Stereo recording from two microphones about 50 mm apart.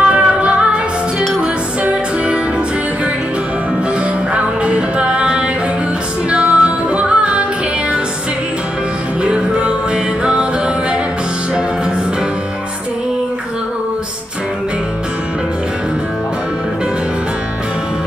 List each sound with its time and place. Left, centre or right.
0.0 s music: right
4.3 s music: right
9.2 s music: right